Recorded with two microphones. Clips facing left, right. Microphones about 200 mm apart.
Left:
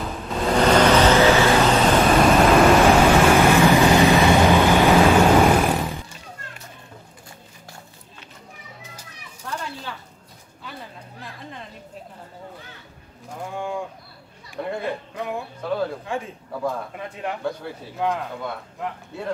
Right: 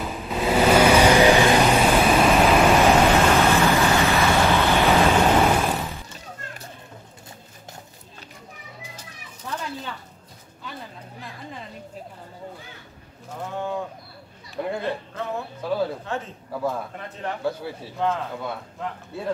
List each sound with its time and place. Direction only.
0.0 s vehicle: centre (ahead or behind)
2.8 s vehicle: 10° left (ahead or behind)
15.2 s music: 15° left (ahead or behind)
16.1 s a sound: 10° left (ahead or behind)
17.4 s a sound: 5° right (ahead or behind)
17.9 s speech: 15° left (ahead or behind)